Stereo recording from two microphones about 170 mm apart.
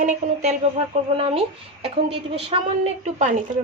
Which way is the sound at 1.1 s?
30° right (ahead or behind).